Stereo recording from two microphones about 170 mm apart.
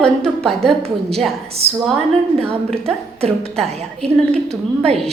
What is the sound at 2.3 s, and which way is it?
A woman's voice, 35° right (ahead or behind).